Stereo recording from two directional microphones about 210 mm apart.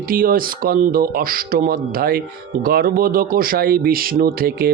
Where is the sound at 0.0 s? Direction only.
45° right (ahead or behind).